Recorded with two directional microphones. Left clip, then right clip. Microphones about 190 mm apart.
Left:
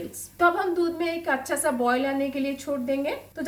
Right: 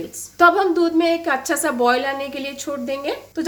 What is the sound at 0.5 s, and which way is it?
A woman's voice, 60° right (ahead or behind).